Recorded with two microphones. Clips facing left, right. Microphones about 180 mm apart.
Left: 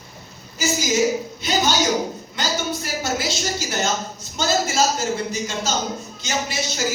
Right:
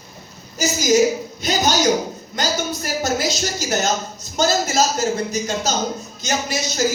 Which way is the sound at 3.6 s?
40° right (ahead or behind).